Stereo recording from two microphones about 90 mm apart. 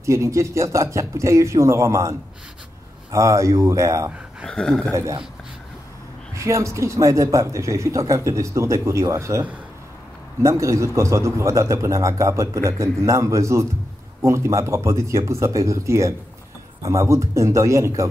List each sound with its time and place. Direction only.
0.0 s speech: 35° right (ahead or behind)
4.5 s speech: 10° left (ahead or behind)
6.3 s speech: 35° right (ahead or behind)
10.4 s speech: 35° right (ahead or behind)